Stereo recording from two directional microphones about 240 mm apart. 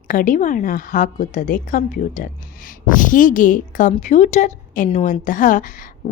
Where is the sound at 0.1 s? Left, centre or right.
Left.